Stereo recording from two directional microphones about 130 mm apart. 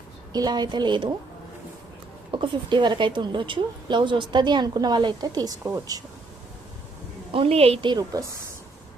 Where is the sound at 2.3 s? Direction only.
40° right (ahead or behind).